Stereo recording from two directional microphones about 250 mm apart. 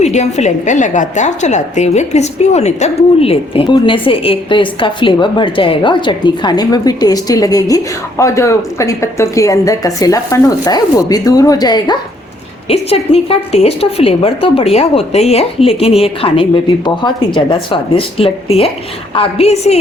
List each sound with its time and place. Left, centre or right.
0.0 s a woman's voice: left